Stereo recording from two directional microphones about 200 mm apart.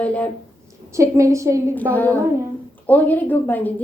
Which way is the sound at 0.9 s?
15° right (ahead or behind).